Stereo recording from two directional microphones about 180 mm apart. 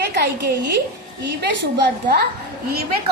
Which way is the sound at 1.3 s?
70° right (ahead or behind).